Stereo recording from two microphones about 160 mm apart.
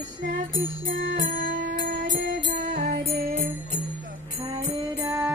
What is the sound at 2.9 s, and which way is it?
Music, 80° right.